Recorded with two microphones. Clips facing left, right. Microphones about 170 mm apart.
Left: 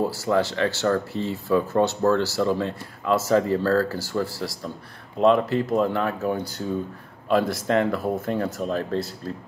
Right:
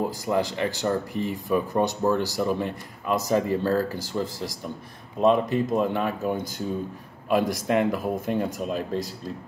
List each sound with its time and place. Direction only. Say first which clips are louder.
0.0 s speech: left 3 dB; 15° right (ahead or behind)